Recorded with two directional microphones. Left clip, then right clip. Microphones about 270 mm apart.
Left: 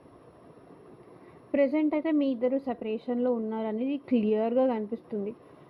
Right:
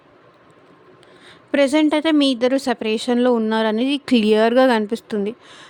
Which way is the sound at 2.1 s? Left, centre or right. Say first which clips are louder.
Right 10 dB; right.